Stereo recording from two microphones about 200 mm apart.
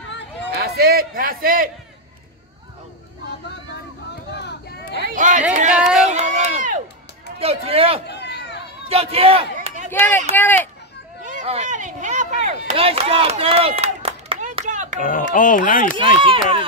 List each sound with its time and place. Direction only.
0.5 s a man's voice: 50° right (ahead or behind)
4.3 s a sound: 55° left (ahead or behind)
5.0 s chatter: 40° right (ahead or behind)
5.8 s a sound: centre (ahead or behind)
6.0 s run: 35° right (ahead or behind)
7.3 s speech: 30° right (ahead or behind)
8.1 s a sound: 55° left (ahead or behind)
8.8 s a sound: 30° right (ahead or behind)
9.8 s a child's voice: 10° left (ahead or behind)
11.2 s speech: 35° right (ahead or behind)
15.0 s speech: 40° left (ahead or behind)
16.0 s speech: 25° right (ahead or behind)